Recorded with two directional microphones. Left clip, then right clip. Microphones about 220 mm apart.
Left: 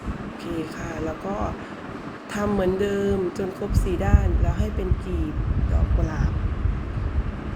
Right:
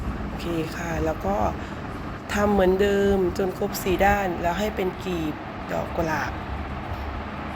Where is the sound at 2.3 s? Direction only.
10° right (ahead or behind).